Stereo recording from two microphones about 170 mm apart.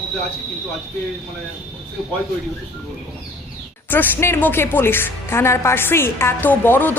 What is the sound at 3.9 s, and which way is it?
Speech, 15° left (ahead or behind).